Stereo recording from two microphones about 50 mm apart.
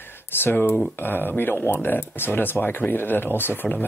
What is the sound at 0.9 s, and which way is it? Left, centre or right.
Speech, left.